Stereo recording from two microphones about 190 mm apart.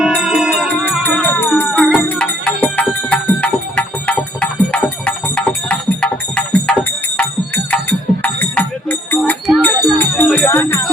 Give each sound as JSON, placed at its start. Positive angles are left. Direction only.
{"t": 0.0, "sound": "music", "side_deg": -5}
{"t": 0.9, "sound": "music", "side_deg": 10}